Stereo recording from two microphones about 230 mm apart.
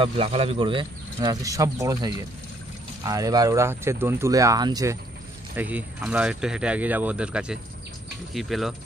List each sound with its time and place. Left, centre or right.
0.0 s speech: right; by 8.7 s centre